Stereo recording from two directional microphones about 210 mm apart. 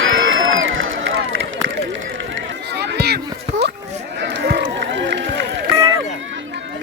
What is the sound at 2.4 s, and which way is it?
Run, 55° right (ahead or behind).